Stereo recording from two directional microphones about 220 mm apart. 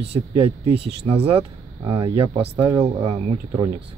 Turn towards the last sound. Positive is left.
turn(degrees=-25)  # may be behind; listen again after turning